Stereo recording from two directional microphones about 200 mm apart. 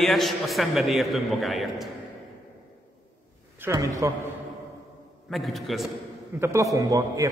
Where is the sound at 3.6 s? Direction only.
15° right (ahead or behind).